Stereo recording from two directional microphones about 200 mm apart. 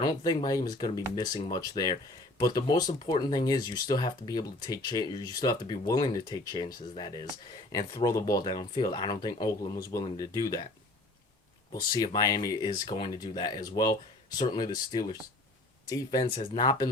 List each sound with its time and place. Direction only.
0.0 s speech: 20° left (ahead or behind)
11.7 s speech: 20° left (ahead or behind)